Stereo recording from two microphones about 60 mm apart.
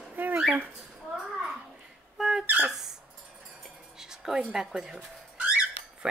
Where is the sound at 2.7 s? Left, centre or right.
Centre.